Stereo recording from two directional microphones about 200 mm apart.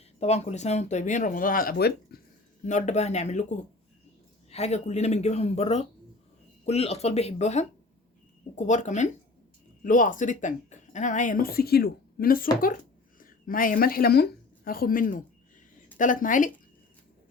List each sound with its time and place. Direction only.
0.2 s speech: 35° left (ahead or behind)
2.6 s speech: 35° left (ahead or behind)
4.5 s speech: 35° left (ahead or behind)